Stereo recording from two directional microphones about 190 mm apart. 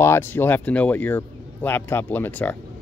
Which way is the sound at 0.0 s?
15° left (ahead or behind).